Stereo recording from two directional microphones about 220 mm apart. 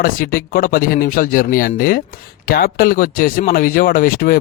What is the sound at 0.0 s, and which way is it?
Speech, 40° left (ahead or behind).